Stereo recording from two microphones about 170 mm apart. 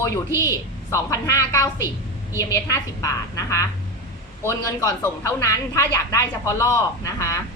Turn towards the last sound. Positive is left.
turn(degrees=20)  # may be behind; listen again after turning